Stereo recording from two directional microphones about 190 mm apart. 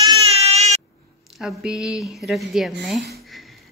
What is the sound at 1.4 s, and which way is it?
Speech, 5° right (ahead or behind).